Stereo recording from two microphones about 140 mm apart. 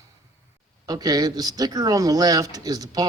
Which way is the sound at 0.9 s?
30° right (ahead or behind).